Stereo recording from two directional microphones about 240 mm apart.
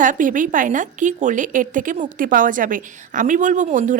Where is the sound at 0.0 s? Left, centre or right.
Right.